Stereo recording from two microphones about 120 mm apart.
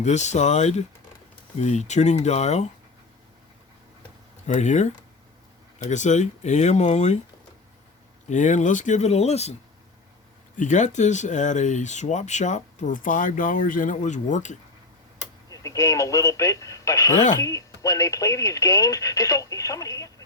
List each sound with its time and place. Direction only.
0.0 s speech: 75° left (ahead or behind)
4.4 s speech: 80° left
5.9 s speech: 85° left
8.3 s speech: 90° left; by 9.6 s 60° left (ahead or behind)
10.6 s speech: 90° left
15.4 s speech: 30° left (ahead or behind)